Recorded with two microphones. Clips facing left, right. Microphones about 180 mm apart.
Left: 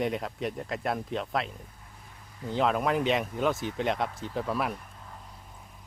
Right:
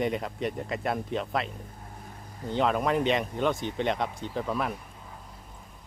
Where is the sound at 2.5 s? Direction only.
Centre (ahead or behind).